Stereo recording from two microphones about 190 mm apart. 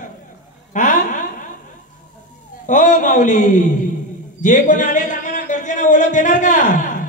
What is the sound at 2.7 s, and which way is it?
A man's voice, 40° left (ahead or behind).